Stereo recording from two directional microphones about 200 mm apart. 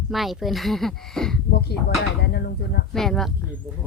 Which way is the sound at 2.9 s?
Centre (ahead or behind).